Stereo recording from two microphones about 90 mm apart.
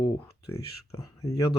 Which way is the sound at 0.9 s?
35° left (ahead or behind).